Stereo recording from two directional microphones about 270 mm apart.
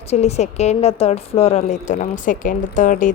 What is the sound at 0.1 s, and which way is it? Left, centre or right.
A woman's voice, left.